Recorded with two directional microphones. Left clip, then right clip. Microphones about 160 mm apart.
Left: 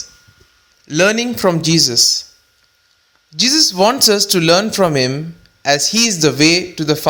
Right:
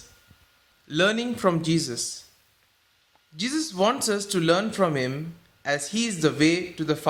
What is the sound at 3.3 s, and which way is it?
A man's voice, 35° left (ahead or behind).